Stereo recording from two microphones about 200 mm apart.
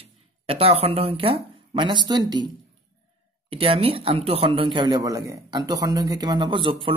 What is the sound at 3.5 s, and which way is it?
Speech, 30° right (ahead or behind).